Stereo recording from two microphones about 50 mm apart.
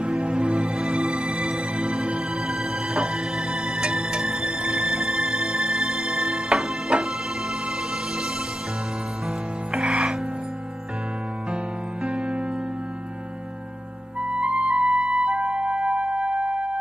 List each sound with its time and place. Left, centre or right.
0.2 s music: right
0.7 s music: centre
9.7 s music: centre
14.4 s music: centre